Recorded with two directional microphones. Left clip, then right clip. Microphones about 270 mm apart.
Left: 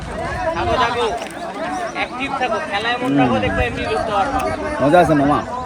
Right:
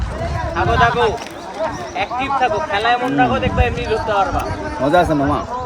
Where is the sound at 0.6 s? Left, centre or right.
Right.